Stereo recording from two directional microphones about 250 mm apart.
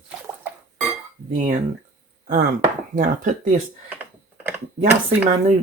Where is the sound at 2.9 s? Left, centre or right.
Right.